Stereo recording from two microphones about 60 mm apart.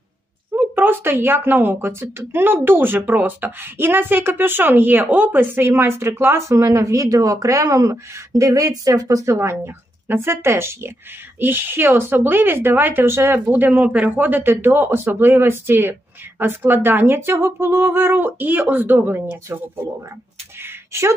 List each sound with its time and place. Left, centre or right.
0.6 s speech: right
9.3 s speech: right
11.3 s speech: right
13.7 s speech: centre; by 19.2 s right